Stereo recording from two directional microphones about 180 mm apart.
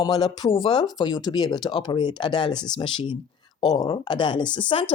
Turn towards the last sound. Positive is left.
turn(degrees=30)  # may be behind; listen again after turning